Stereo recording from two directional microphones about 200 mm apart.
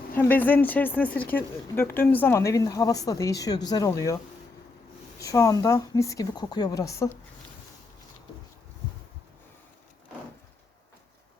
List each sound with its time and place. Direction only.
0.2 s speech: 10° left (ahead or behind)
5.2 s speech: 15° left (ahead or behind)